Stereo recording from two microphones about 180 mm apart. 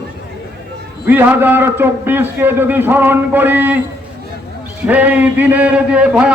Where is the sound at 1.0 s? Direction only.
10° right (ahead or behind).